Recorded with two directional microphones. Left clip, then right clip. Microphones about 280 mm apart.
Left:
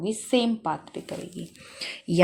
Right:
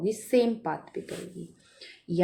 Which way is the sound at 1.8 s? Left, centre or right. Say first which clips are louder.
Left 5 dB; left.